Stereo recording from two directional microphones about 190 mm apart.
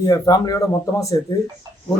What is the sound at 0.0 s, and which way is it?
A man's voice, 20° left (ahead or behind).